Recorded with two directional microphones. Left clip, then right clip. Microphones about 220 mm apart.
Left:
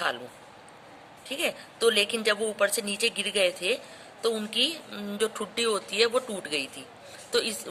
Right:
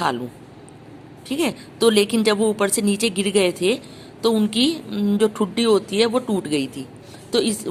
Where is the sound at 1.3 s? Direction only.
20° right (ahead or behind).